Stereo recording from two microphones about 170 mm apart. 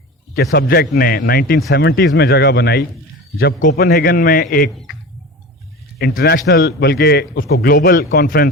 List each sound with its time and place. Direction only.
0.5 s a man's voice: 65° left (ahead or behind)
3.3 s a man's voice: 55° left (ahead or behind)
6.0 s a man's voice: 65° left (ahead or behind)